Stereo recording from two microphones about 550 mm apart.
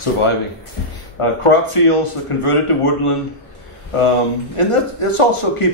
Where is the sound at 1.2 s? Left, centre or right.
Left.